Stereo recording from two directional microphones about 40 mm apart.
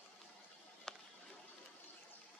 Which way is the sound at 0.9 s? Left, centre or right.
Centre.